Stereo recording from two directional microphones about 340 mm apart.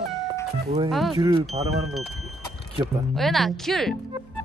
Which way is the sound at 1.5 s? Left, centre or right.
Centre.